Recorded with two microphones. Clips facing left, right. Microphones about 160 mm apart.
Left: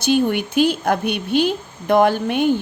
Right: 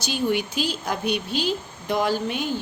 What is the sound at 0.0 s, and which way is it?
A woman's voice, 55° left (ahead or behind).